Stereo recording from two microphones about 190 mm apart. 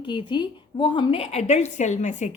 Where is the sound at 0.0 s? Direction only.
25° left (ahead or behind).